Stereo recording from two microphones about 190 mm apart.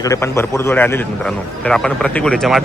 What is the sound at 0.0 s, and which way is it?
Speech, 15° left (ahead or behind).